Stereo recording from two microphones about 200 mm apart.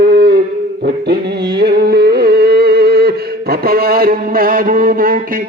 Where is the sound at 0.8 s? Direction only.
55° right (ahead or behind).